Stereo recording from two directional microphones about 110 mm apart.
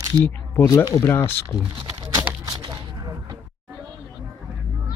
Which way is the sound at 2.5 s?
40° right (ahead or behind).